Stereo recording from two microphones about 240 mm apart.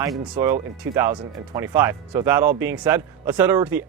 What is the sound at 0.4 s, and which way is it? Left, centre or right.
Speech, centre.